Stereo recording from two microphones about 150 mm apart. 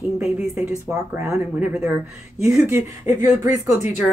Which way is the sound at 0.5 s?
15° right (ahead or behind).